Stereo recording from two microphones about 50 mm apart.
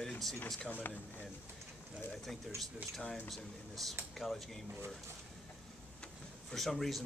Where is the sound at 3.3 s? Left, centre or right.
Centre.